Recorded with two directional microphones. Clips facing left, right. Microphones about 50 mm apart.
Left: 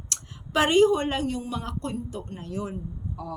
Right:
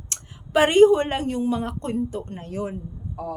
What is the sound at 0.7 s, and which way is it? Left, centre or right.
Speech, right.